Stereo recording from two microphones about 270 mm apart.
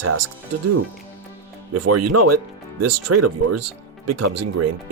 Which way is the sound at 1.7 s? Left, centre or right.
Right.